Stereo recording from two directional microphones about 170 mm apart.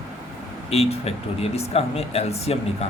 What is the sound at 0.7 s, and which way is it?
Speech, 35° left (ahead or behind).